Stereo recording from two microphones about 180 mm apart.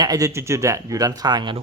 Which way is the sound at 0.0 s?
20° right (ahead or behind).